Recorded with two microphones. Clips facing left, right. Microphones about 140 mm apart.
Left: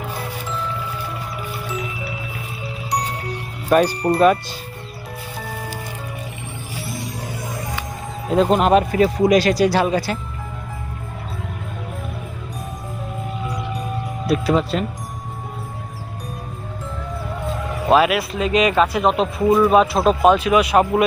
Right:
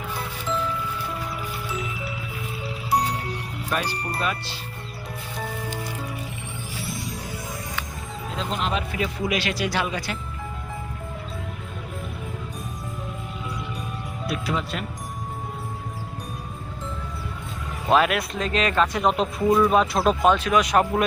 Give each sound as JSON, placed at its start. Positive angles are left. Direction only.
{"t": 3.7, "sound": "speech", "side_deg": 45}
{"t": 6.9, "sound": "music", "side_deg": 0}
{"t": 8.3, "sound": "a man's voice", "side_deg": 50}
{"t": 14.3, "sound": "a man's voice", "side_deg": 40}
{"t": 17.9, "sound": "speech", "side_deg": 5}